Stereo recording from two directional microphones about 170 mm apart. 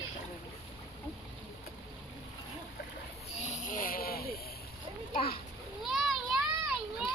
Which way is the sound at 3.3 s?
45° left (ahead or behind).